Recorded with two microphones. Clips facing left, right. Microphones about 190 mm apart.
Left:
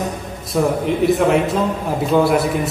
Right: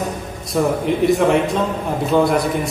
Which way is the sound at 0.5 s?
Centre (ahead or behind).